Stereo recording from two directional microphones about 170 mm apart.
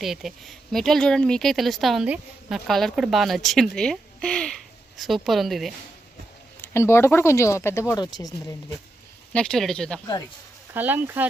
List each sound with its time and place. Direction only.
0.0 s speech: centre (ahead or behind)
6.6 s speech: 15° left (ahead or behind)
9.3 s speech: 5° left (ahead or behind)
10.8 s speech: 10° right (ahead or behind)